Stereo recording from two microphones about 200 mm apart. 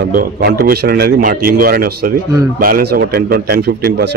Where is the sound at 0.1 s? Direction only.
50° right (ahead or behind).